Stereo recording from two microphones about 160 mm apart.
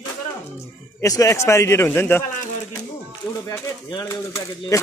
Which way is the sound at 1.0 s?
20° left (ahead or behind).